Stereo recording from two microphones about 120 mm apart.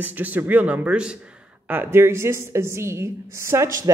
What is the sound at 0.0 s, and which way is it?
Speech, 15° right (ahead or behind).